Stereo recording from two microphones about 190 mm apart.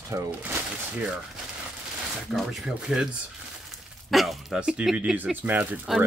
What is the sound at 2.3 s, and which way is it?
Speech, centre (ahead or behind).